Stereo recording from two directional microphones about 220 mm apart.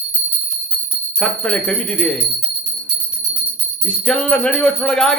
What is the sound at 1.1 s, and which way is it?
Speech, 5° left (ahead or behind).